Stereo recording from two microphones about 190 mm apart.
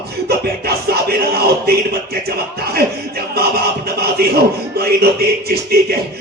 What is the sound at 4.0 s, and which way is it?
A man's voice, 55° right (ahead or behind).